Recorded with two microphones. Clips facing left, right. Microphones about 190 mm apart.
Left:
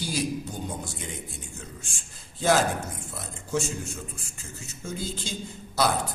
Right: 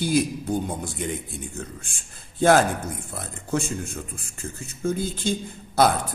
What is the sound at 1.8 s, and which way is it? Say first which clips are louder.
A man's voice: even; 55° right (ahead or behind).